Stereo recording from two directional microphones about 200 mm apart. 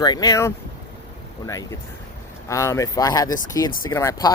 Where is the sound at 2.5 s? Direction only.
15° left (ahead or behind).